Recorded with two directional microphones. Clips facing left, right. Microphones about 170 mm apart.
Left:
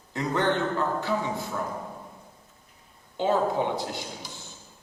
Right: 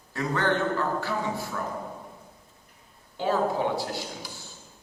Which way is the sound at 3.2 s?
20° left (ahead or behind).